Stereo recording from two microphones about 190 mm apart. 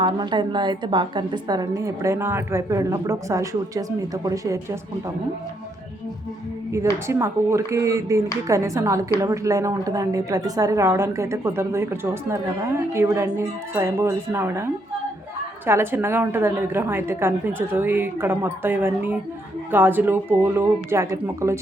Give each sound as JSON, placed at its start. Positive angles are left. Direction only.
{"t": 0.0, "sound": "a woman's voice", "side_deg": -25}
{"t": 7.1, "sound": "a woman's voice", "side_deg": -15}